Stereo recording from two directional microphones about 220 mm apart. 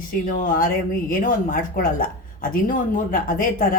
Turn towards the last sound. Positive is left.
turn(degrees=40)  # may be behind; listen again after turning